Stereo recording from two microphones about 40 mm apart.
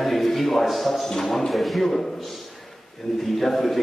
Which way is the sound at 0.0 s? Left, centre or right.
Centre.